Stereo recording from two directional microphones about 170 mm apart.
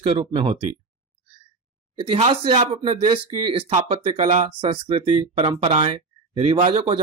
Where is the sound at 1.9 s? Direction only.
30° right (ahead or behind).